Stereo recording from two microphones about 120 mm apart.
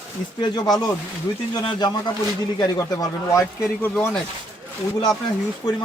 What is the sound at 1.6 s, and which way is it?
Speech, 40° left (ahead or behind).